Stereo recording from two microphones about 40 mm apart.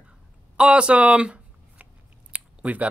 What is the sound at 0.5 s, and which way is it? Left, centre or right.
Speech, right.